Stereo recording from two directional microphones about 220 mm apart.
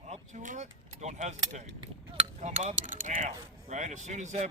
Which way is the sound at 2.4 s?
30° right (ahead or behind).